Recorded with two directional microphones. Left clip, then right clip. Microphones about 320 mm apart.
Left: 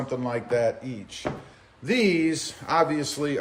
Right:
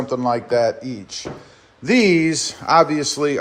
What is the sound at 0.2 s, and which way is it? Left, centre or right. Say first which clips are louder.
A man's voice: right 7 dB; centre.